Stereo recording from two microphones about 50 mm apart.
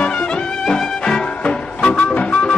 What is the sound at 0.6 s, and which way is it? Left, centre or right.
Music, centre.